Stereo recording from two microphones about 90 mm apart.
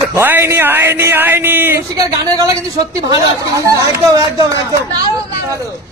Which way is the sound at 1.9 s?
45° right (ahead or behind).